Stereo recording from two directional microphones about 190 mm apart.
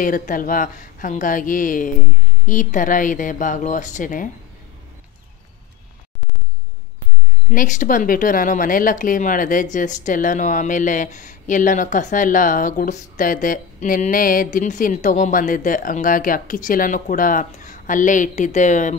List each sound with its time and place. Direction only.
0.0 s speech: 45° left (ahead or behind)
7.5 s speech: 40° left (ahead or behind)